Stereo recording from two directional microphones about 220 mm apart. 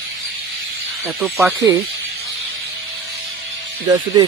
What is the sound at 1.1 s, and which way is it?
Speech, centre (ahead or behind).